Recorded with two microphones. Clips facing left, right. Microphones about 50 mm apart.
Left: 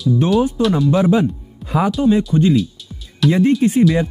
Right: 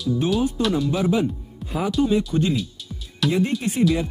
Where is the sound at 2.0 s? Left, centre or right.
Centre.